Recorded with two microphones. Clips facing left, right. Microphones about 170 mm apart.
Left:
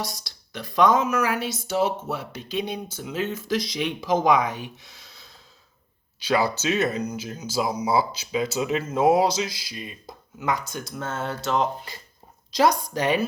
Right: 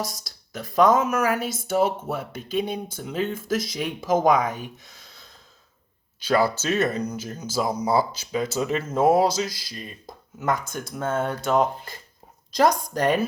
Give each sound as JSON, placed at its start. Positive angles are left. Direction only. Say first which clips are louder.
{"t": 0.0, "sound": "speech", "louder": "right 1 dB", "side_deg": -50}